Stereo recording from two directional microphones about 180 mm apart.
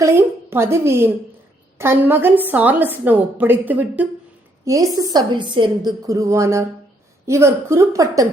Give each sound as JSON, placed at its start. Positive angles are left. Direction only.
{"t": 0.0, "sound": "a woman's voice", "side_deg": -15}